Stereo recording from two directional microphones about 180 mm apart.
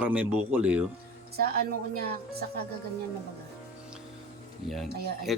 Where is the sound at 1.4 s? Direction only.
55° right (ahead or behind).